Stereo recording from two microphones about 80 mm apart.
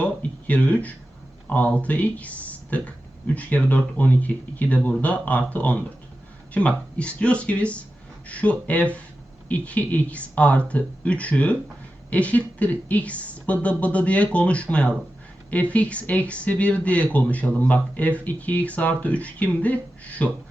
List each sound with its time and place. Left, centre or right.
0.0 s speech: centre